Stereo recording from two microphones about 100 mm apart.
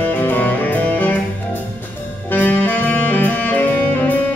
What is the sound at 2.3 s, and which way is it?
Music, 15° left (ahead or behind).